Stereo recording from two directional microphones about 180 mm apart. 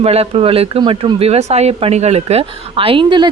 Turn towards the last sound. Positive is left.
turn(degrees=-25)  # may be behind; listen again after turning